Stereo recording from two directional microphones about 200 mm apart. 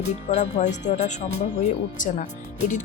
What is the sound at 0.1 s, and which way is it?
Speech, 35° left (ahead or behind).